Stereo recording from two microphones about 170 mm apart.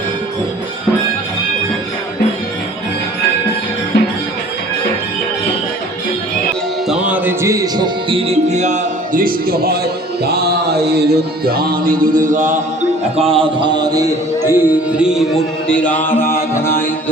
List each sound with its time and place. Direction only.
3.9 s music: 90° left
6.8 s music: 5° right (ahead or behind); by 8.2 s 25° right (ahead or behind)
8.3 s a man's voice: 40° right (ahead or behind)
13.1 s speech: 35° right (ahead or behind); by 16.2 s 10° left (ahead or behind)
16.3 s music: 15° left (ahead or behind)